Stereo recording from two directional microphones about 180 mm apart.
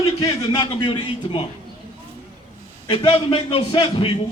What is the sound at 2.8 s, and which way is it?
Speech, 30° left (ahead or behind).